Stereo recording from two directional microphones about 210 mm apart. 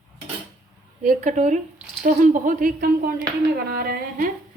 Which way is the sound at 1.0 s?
35° right (ahead or behind).